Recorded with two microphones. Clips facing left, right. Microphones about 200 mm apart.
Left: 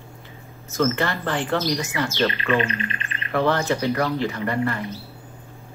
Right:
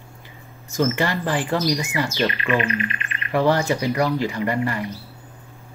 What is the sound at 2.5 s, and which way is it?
Music, 30° left (ahead or behind).